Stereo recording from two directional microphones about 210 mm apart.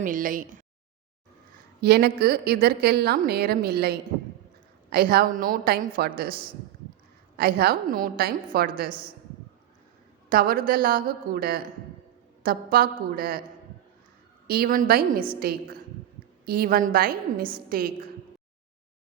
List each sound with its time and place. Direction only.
0.0 s speech: 40° right (ahead or behind)
1.8 s a woman's voice: 50° right (ahead or behind)
10.2 s a woman's voice: 45° right (ahead or behind)
14.4 s a woman's voice: 45° right (ahead or behind)